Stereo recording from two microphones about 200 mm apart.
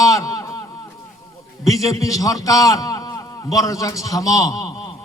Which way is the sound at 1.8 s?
15° left (ahead or behind).